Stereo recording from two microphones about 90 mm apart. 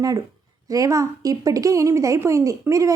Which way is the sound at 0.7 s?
40° right (ahead or behind).